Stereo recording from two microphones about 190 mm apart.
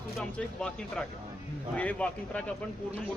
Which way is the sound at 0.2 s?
5° left (ahead or behind).